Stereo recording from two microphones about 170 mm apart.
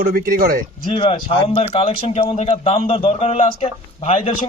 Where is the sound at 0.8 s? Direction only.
30° left (ahead or behind).